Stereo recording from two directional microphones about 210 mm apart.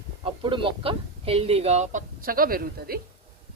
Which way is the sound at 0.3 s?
25° right (ahead or behind).